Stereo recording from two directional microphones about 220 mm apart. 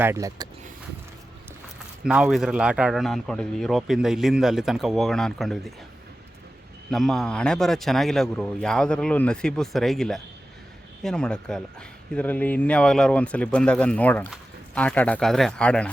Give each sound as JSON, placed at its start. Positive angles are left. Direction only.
{"t": 0.0, "sound": "speech", "side_deg": -15}
{"t": 2.0, "sound": "speech", "side_deg": -5}
{"t": 6.9, "sound": "speech", "side_deg": 0}